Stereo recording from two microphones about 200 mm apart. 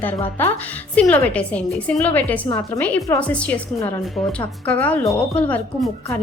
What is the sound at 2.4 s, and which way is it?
Speech, 20° left (ahead or behind).